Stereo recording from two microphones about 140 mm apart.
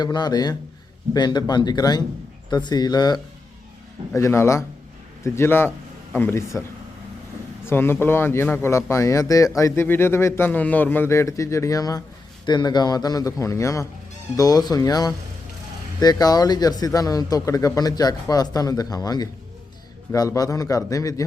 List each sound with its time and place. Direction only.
0.0 s a man's voice: 30° left (ahead or behind)
7.7 s a man's voice: 15° left (ahead or behind)